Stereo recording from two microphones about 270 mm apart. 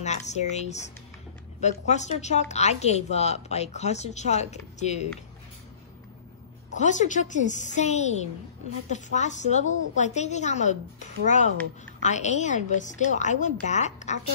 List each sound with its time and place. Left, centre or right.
0.0 s a woman's voice: left
6.7 s a woman's voice: left